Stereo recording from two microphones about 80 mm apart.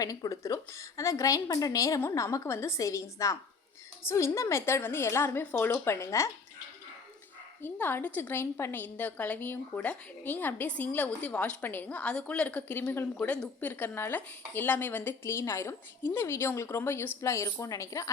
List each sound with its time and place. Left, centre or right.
0.0 s a woman's voice: left
7.6 s a woman's voice: left
12.8 s a woman's voice: left
17.2 s speech: left